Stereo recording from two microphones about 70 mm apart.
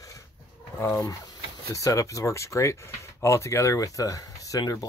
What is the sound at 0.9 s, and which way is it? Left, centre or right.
Speech, left.